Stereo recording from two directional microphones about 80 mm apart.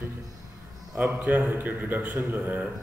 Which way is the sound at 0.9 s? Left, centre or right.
Centre.